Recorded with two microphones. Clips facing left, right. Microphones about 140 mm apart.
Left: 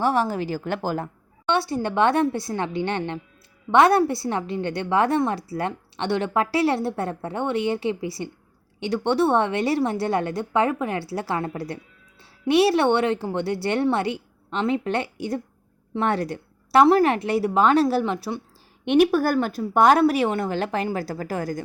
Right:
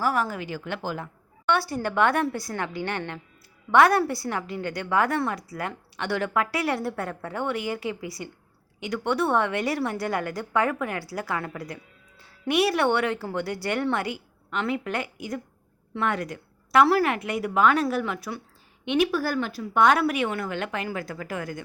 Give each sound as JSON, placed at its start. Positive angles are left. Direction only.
{"t": 0.0, "sound": "a woman's voice", "side_deg": 30}
{"t": 1.5, "sound": "a woman's voice", "side_deg": 25}
{"t": 18.9, "sound": "a woman's voice", "side_deg": 50}